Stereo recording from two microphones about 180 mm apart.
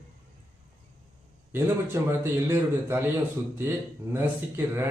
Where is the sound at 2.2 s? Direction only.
15° right (ahead or behind).